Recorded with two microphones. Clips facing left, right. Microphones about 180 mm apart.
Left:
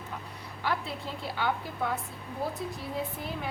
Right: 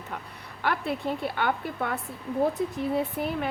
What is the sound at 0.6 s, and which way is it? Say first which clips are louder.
A woman's voice: right 5 dB; 60° right (ahead or behind).